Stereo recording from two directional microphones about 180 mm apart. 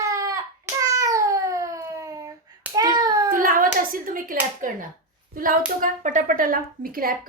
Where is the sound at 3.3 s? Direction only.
50° right (ahead or behind).